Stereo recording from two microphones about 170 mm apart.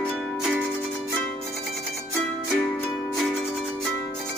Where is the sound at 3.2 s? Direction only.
Centre (ahead or behind).